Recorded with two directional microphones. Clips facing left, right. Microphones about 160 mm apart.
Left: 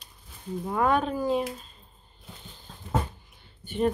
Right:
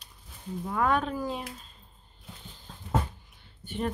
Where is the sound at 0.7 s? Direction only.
15° left (ahead or behind).